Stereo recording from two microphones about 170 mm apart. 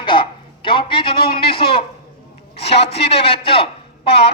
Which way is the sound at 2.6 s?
35° left (ahead or behind).